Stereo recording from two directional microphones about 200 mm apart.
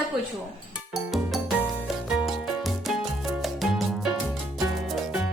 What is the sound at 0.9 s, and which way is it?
Music, centre (ahead or behind).